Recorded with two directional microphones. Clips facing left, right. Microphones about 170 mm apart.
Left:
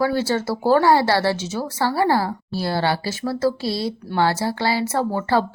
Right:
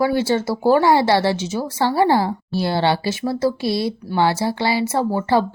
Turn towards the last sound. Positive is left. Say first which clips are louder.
# right 2 dB
turn(degrees=-15)  # may be behind; listen again after turning